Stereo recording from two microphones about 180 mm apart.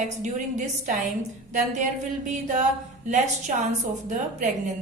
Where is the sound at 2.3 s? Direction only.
40° right (ahead or behind).